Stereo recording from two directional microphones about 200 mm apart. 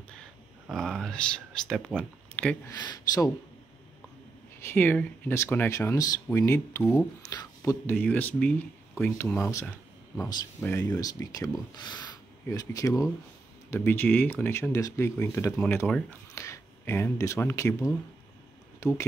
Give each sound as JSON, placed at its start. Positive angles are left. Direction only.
{"t": 0.7, "sound": "speech", "side_deg": 0}
{"t": 2.8, "sound": "speech", "side_deg": 20}
{"t": 4.6, "sound": "speech", "side_deg": 10}